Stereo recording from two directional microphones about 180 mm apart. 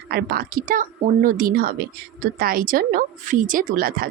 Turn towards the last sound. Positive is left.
turn(degrees=-55)  # may be behind; listen again after turning